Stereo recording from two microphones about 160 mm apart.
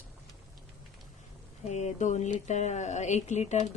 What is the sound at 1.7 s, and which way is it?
Speech, 45° left (ahead or behind).